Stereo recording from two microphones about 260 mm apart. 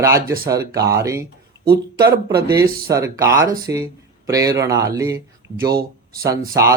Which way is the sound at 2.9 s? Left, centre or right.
Centre.